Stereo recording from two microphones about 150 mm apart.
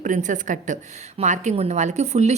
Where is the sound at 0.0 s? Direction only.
55° right (ahead or behind).